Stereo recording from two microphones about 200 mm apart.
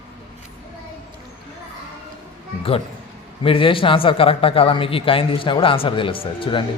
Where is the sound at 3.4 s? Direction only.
25° left (ahead or behind).